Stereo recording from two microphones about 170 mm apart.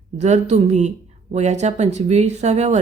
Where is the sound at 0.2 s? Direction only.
40° right (ahead or behind).